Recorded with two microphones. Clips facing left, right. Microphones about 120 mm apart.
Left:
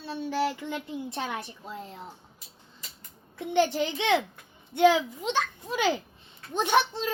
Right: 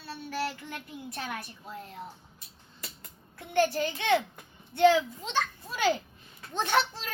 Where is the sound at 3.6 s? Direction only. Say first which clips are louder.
Left 1 dB; 20° left (ahead or behind).